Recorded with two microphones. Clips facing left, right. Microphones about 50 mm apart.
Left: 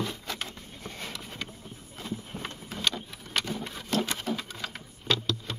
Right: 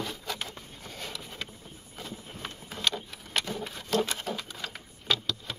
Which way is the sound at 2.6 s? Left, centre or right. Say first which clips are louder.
Even; centre.